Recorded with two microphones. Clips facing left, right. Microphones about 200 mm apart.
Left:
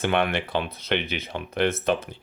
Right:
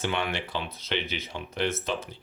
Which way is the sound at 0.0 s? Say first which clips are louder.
Left 6 dB; 55° left (ahead or behind).